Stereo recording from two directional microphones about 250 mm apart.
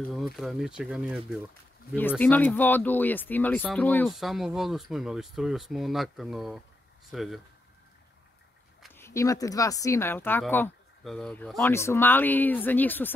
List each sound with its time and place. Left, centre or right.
0.1 s speech: centre
2.0 s speech: centre
8.8 s speech: centre